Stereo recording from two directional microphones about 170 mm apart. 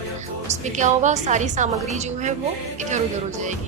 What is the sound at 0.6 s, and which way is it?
A woman's voice, 45° right (ahead or behind).